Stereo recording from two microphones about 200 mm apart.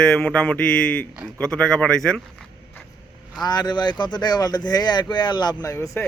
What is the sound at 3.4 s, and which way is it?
Speech, 20° left (ahead or behind).